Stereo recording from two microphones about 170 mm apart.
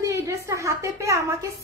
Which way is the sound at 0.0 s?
20° right (ahead or behind).